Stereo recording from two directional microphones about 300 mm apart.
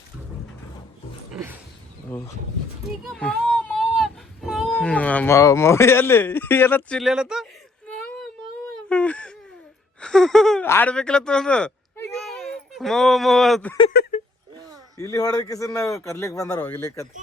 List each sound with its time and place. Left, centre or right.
2.0 s a man's voice: centre
8.9 s wail: centre
10.0 s speech: centre
14.0 s a sound: left
14.9 s a man's voice: centre